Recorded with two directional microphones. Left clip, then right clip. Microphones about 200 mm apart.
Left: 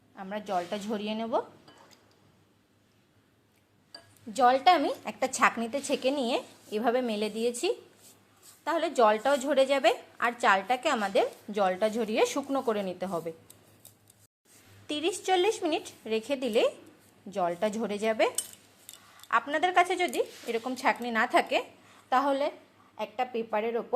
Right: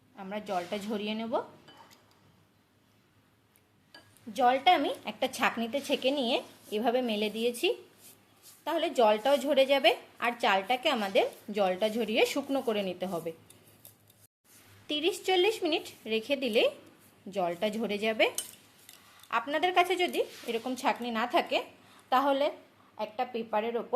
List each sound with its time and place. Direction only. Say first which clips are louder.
0.2 s a woman's voice: left 2 dB; 10° left (ahead or behind)
4.4 s a woman's voice: left 2 dB; 20° left (ahead or behind)
5.0 s a woman's voice: left 4 dB; 10° left (ahead or behind)
14.8 s a woman's voice: left 1 dB; 5° left (ahead or behind)
22.1 s a woman's voice: even; centre (ahead or behind)